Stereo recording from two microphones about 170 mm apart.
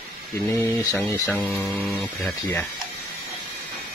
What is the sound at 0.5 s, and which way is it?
Speech, 15° left (ahead or behind).